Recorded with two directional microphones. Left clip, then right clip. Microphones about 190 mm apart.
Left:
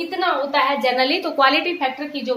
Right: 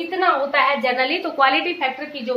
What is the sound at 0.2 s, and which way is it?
A woman's voice, 25° left (ahead or behind).